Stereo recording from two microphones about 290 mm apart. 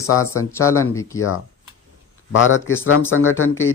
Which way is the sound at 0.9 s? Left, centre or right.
Centre.